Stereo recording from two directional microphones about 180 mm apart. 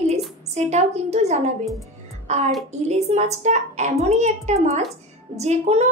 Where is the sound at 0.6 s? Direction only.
40° right (ahead or behind).